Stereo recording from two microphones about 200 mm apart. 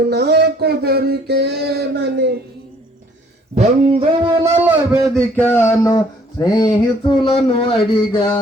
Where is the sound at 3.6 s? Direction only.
30° right (ahead or behind).